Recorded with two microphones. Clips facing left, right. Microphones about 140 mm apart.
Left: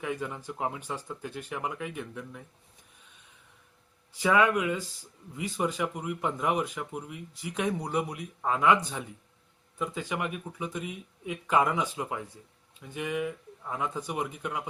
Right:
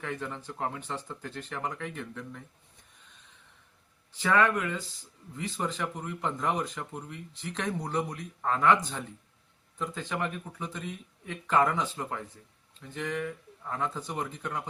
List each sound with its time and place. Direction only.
0.0 s speech: 10° left (ahead or behind)
4.2 s speech: 10° left (ahead or behind)